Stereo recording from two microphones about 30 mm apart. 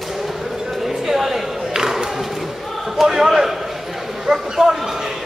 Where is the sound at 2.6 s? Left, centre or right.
Centre.